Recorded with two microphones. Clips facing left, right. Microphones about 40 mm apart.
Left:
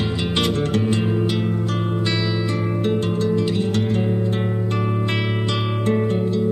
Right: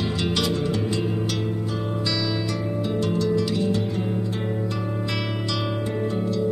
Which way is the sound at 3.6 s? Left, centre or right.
Left.